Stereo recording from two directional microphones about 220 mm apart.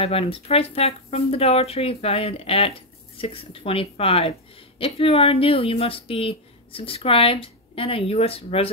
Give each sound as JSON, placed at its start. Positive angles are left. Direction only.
{"t": 0.0, "sound": "speech", "side_deg": 25}